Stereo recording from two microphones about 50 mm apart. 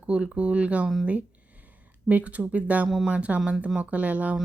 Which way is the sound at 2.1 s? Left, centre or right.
Right.